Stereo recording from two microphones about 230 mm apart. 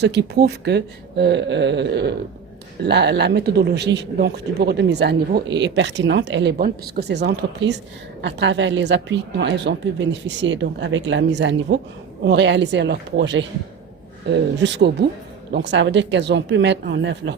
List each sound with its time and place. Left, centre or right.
0.0 s speech: right